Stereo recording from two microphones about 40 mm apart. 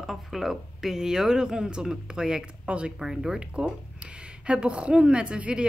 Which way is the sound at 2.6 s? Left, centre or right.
Right.